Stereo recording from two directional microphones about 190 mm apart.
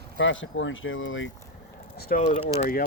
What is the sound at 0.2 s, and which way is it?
Speech, 80° left.